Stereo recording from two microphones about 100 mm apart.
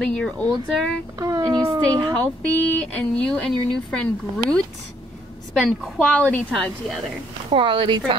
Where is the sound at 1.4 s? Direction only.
50° right (ahead or behind).